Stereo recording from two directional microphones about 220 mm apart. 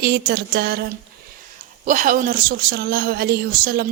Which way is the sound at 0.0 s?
45° right (ahead or behind).